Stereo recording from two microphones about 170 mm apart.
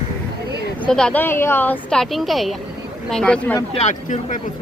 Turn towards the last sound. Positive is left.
turn(degrees=45)  # may be behind; listen again after turning